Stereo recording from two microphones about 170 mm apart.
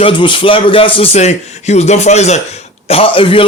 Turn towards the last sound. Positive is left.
turn(degrees=30)  # may be behind; listen again after turning